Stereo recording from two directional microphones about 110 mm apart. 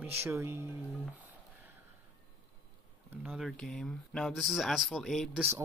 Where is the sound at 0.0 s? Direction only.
25° right (ahead or behind).